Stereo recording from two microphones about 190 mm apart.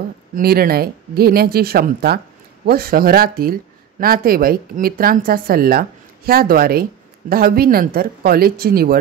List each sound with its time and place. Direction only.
0.4 s speech: 50° right (ahead or behind)